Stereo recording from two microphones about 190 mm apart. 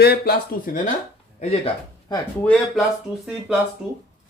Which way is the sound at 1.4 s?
35° left (ahead or behind).